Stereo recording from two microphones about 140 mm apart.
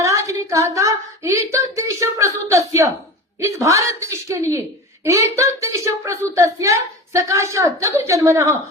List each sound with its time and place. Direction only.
0.0 s speech: 20° right (ahead or behind)